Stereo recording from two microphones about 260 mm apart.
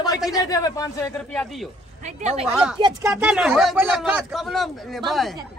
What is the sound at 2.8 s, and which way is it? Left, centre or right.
Speech, centre.